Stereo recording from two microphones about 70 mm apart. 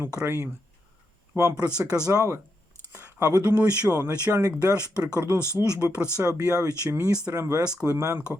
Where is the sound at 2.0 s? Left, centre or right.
Right.